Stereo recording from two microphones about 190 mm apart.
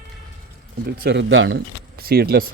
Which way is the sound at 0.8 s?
60° right (ahead or behind).